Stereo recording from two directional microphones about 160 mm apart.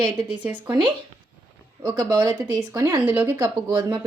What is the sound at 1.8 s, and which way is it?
Speech, 25° right (ahead or behind).